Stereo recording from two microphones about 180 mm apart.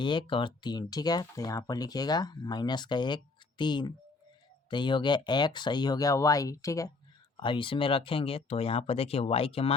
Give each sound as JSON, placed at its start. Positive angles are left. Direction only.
{"t": 0.0, "sound": "speech", "side_deg": 25}